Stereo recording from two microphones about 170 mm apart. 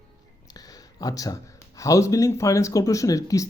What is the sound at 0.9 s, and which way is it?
A man's voice, 20° left (ahead or behind).